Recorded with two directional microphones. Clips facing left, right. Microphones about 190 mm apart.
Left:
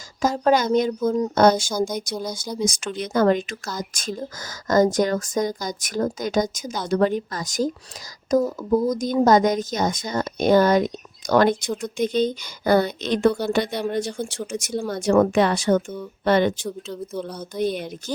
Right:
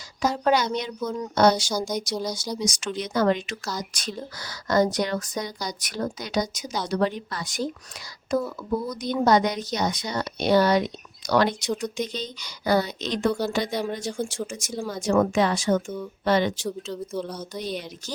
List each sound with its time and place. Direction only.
0.2 s a woman's voice: 45° left (ahead or behind)
16.6 s speech: centre (ahead or behind)
17.5 s a woman's voice: 55° left (ahead or behind)